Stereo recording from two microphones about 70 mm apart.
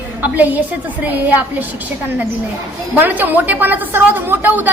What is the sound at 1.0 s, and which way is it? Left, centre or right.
Speech, right.